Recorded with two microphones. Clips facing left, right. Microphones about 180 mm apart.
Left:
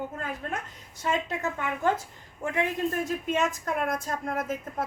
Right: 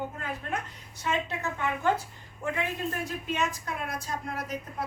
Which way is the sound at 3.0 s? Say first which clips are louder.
Left 4 dB; 45° left (ahead or behind).